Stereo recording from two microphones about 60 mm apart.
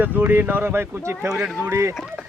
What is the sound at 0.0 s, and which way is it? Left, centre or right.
Speech, right.